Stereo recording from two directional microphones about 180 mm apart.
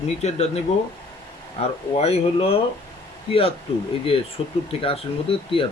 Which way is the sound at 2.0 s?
35° left (ahead or behind).